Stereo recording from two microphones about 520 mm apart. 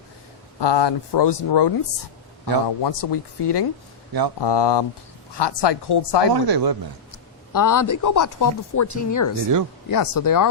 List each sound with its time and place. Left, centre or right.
0.6 s speech: left
6.3 s speech: right
7.1 s a man's voice: left